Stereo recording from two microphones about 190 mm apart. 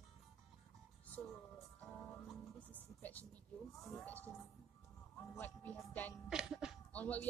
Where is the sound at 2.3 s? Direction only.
10° left (ahead or behind).